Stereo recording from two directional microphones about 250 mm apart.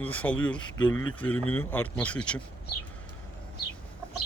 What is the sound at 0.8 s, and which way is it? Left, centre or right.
Speech, left.